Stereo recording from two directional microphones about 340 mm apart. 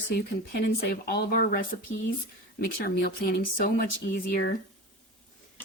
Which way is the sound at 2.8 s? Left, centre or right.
Left.